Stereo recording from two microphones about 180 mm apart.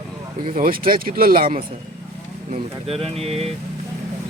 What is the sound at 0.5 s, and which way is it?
Speech, 50° right (ahead or behind).